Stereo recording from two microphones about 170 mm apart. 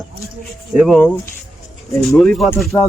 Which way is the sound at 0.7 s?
Centre (ahead or behind).